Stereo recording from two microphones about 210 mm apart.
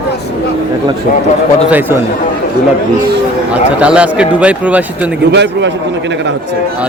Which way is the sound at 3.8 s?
5° right (ahead or behind).